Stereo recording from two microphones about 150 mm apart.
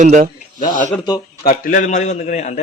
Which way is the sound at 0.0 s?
55° right (ahead or behind).